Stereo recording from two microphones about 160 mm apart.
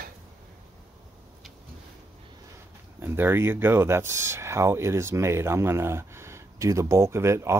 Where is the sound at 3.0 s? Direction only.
15° right (ahead or behind).